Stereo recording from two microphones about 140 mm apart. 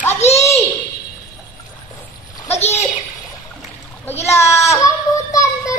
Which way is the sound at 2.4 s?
50° left (ahead or behind).